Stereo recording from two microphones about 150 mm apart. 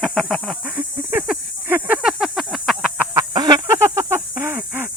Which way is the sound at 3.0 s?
20° right (ahead or behind).